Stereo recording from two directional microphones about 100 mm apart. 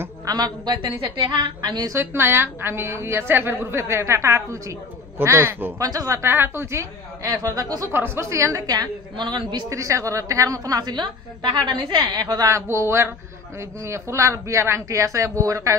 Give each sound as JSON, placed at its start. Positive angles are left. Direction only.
{"t": 0.2, "sound": "a woman's voice", "side_deg": -45}
{"t": 2.0, "sound": "a woman's voice", "side_deg": -25}
{"t": 5.8, "sound": "a woman's voice", "side_deg": -35}
{"t": 7.9, "sound": "a woman's voice", "side_deg": -20}
{"t": 9.1, "sound": "a woman's voice", "side_deg": -50}
{"t": 9.7, "sound": "a woman's voice", "side_deg": -30}